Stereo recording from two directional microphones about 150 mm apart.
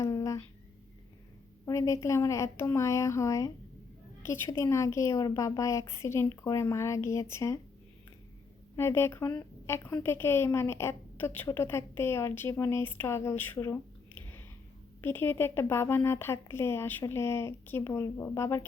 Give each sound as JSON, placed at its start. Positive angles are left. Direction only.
{"t": 0.0, "sound": "a sound", "side_deg": 20}
{"t": 1.6, "sound": "a woman's voice", "side_deg": 20}
{"t": 8.7, "sound": "a woman's voice", "side_deg": 15}
{"t": 15.0, "sound": "a woman's voice", "side_deg": 15}